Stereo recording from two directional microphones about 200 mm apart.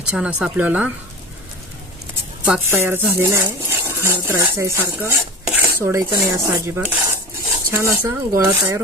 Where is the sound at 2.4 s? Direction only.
10° right (ahead or behind).